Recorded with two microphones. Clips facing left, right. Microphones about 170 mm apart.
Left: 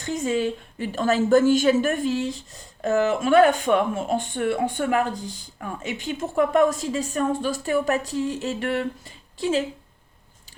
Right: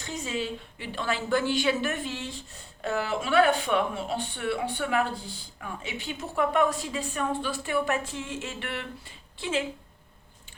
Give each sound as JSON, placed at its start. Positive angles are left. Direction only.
{"t": 0.0, "sound": "speech", "side_deg": 50}